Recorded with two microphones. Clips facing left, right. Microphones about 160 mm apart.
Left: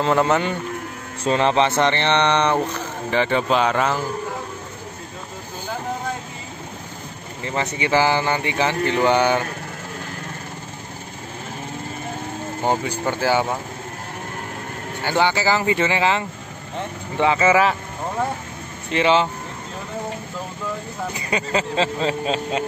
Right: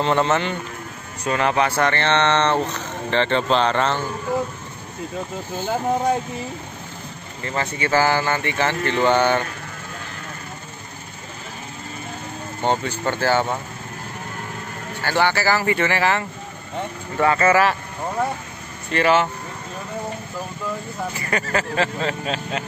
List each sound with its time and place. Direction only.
0.0 s speech: 5° left (ahead or behind)
1.2 s speech: 25° left (ahead or behind); by 4.0 s 10° left (ahead or behind)
7.4 s speech: 15° left (ahead or behind)
12.6 s speech: 10° left (ahead or behind)
15.0 s speech: 15° left (ahead or behind)
18.9 s speech: 20° left (ahead or behind)
21.1 s speech: 20° left (ahead or behind)